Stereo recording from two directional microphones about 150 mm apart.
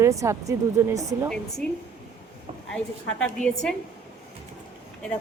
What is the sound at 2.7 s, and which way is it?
A woman's voice, 5° left (ahead or behind).